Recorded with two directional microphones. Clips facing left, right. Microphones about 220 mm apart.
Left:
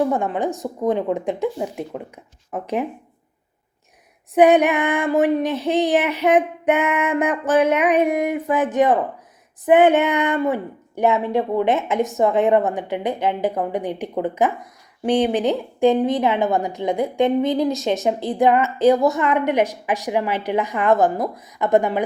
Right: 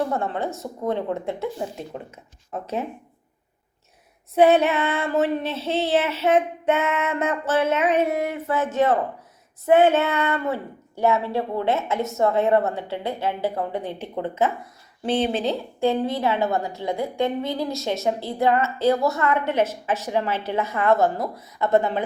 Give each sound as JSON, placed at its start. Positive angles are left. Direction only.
{"t": 0.1, "sound": "a woman's voice", "side_deg": 15}
{"t": 4.4, "sound": "a woman's voice", "side_deg": 15}